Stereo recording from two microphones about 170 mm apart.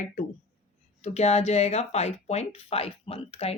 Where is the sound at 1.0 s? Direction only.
40° left (ahead or behind).